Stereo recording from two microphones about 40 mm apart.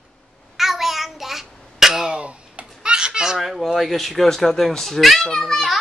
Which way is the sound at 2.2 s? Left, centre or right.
Right.